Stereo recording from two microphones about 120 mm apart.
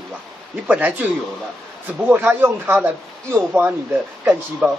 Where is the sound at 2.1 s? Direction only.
20° right (ahead or behind).